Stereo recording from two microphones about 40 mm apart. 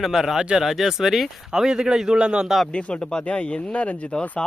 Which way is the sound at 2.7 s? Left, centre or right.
Left.